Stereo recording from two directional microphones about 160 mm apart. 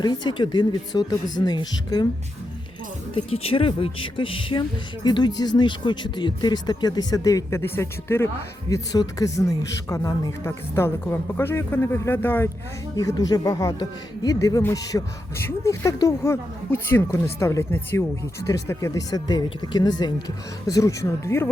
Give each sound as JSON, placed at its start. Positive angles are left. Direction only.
{"t": 0.0, "sound": "speech", "side_deg": 25}
{"t": 3.2, "sound": "speech", "side_deg": 35}
{"t": 13.0, "sound": "speech", "side_deg": 25}